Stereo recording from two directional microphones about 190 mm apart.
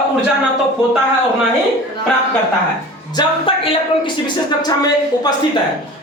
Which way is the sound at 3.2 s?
25° left (ahead or behind).